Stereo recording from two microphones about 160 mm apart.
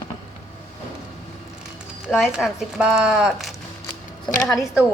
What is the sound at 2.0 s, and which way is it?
Speech, 5° right (ahead or behind).